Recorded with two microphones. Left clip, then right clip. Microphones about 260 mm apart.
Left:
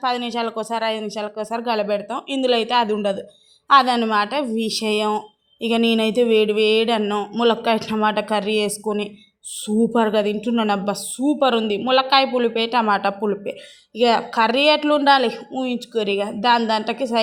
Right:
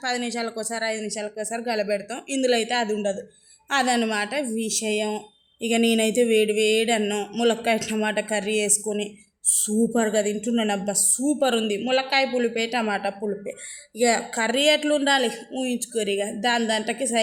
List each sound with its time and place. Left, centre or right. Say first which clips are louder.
0.0 s speech: left 5 dB; centre